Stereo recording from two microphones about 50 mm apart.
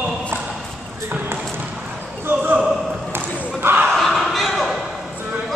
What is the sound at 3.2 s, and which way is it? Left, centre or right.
Basketball bounce, right.